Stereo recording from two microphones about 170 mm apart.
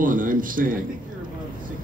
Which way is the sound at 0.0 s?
50° right (ahead or behind).